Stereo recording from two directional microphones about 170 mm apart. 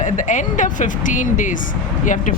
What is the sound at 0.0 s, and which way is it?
Speech, 45° left (ahead or behind).